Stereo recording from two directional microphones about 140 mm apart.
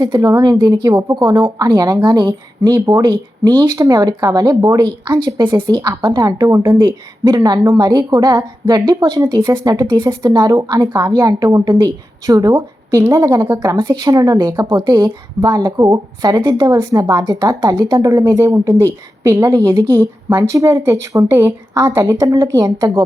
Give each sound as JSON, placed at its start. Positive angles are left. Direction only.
{"t": 0.0, "sound": "a woman's voice", "side_deg": -30}
{"t": 19.7, "sound": "speech", "side_deg": -35}
{"t": 20.0, "sound": "a woman's voice", "side_deg": -20}